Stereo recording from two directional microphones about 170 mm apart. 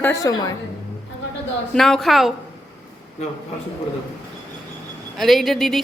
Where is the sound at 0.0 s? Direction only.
20° left (ahead or behind).